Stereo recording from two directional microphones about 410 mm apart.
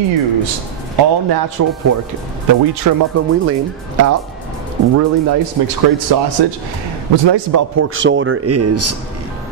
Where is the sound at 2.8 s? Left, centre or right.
Right.